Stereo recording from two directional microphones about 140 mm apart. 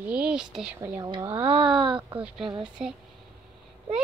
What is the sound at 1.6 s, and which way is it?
Speech, 5° right (ahead or behind).